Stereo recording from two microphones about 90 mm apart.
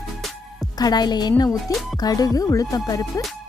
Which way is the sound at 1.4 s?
40° left (ahead or behind).